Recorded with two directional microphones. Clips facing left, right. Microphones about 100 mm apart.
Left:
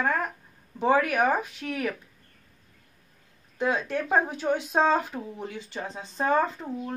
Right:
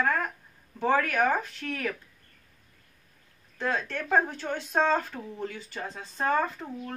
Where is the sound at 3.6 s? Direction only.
15° left (ahead or behind).